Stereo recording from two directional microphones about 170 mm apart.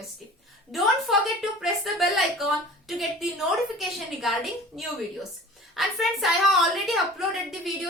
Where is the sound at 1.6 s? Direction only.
Centre (ahead or behind).